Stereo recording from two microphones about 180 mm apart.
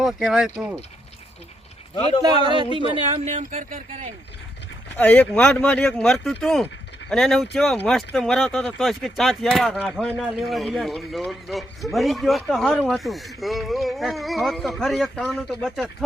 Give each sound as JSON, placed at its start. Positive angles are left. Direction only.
{"t": 0.0, "sound": "speech", "side_deg": 0}
{"t": 2.7, "sound": "speech", "side_deg": -30}
{"t": 4.9, "sound": "speech", "side_deg": 10}